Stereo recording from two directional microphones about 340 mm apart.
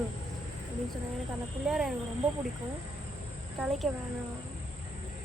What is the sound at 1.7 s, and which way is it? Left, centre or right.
Speech, centre.